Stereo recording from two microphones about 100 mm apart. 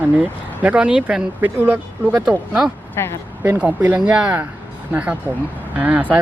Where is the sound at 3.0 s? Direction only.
25° left (ahead or behind).